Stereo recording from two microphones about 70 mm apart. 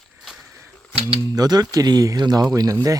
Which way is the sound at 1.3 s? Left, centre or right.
Right.